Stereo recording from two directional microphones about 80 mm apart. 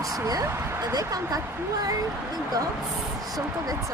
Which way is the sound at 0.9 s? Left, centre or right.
Right.